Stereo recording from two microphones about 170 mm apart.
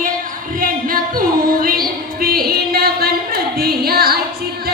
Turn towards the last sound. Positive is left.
turn(degrees=-65)  # may be behind; listen again after turning